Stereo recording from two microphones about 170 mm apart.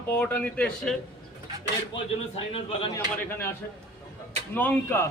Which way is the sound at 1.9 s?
35° left (ahead or behind).